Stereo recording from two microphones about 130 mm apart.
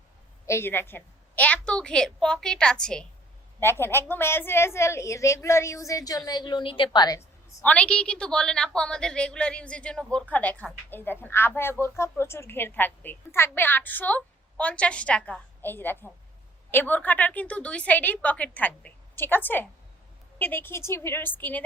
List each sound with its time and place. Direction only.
0.4 s a woman's voice: 20° left (ahead or behind)
3.6 s a woman's voice: 20° left (ahead or behind)
7.6 s a woman's voice: 10° left (ahead or behind)